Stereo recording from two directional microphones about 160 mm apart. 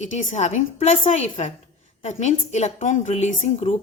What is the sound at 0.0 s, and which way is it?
A woman's voice, 50° left (ahead or behind).